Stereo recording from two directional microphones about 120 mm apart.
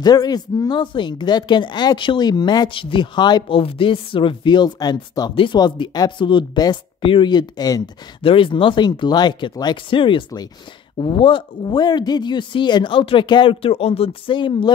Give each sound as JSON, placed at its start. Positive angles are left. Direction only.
{"t": 0.0, "sound": "speech", "side_deg": 35}
{"t": 8.2, "sound": "speech", "side_deg": 50}